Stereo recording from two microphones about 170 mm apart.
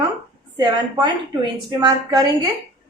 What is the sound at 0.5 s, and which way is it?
A woman's voice, 25° right (ahead or behind).